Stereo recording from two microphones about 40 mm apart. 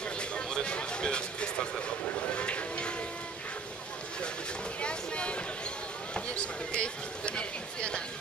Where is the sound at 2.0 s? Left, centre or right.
Left.